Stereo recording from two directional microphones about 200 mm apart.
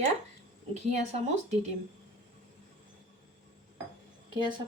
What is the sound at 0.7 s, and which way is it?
Speech, 35° right (ahead or behind).